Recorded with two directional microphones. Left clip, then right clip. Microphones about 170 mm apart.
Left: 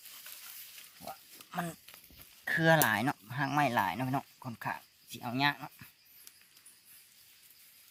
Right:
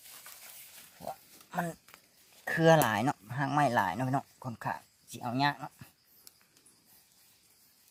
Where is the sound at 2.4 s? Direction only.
25° right (ahead or behind).